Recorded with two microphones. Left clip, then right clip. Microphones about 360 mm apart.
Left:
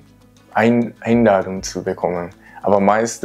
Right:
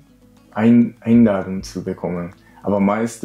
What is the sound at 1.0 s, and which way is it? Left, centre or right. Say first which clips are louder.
Speech: left 3 dB; left.